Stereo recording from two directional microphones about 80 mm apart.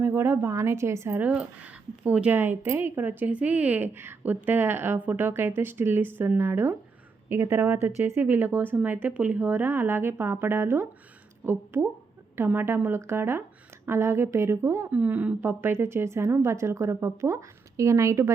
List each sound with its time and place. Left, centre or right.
0.0 s a woman's voice: right
1.2 s a woman's voice: centre; by 14.8 s right
14.8 s a woman's voice: right